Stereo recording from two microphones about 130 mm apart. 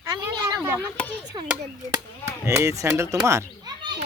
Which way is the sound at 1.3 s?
40° right (ahead or behind).